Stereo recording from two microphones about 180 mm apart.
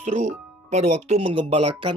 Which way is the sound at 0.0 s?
40° right (ahead or behind).